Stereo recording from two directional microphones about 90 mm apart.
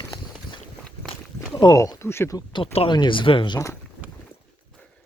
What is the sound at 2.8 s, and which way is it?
Speech, 60° left (ahead or behind).